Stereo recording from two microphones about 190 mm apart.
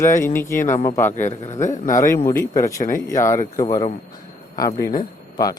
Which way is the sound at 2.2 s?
15° left (ahead or behind).